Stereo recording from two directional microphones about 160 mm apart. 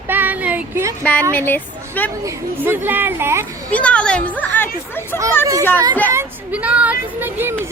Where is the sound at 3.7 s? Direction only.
5° left (ahead or behind).